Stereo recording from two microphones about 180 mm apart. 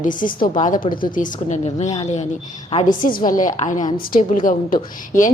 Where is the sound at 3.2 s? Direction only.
45° left (ahead or behind).